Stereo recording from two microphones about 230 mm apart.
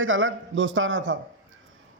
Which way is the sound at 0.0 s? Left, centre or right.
Right.